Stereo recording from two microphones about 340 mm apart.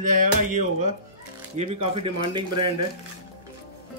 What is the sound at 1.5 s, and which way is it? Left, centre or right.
Speech, centre.